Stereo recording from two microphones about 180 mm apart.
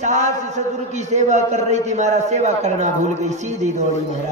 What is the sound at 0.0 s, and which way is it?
A man's voice, 40° right (ahead or behind).